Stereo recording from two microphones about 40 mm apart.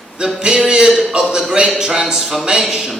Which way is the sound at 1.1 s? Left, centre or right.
Right.